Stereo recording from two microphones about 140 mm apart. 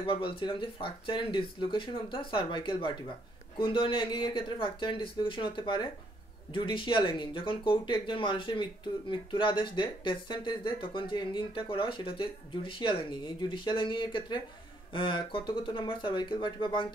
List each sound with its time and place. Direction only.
0.0 s speech: 40° left (ahead or behind)